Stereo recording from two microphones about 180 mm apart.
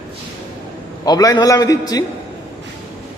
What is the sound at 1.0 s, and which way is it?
Speech, 20° left (ahead or behind).